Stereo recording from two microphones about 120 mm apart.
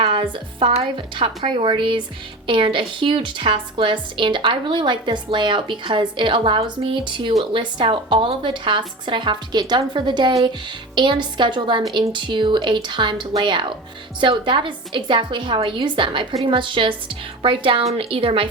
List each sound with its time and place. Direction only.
0.0 s a woman's voice: 45° right (ahead or behind)